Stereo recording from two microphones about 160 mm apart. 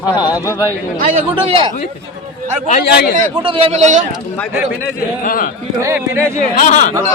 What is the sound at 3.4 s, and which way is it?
Speech, 35° right (ahead or behind).